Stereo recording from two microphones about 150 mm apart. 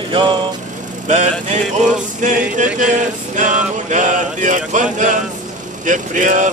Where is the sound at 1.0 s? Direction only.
50° right (ahead or behind).